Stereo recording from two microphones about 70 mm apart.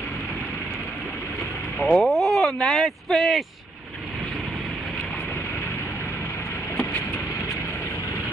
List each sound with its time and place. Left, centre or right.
2.0 s speech: centre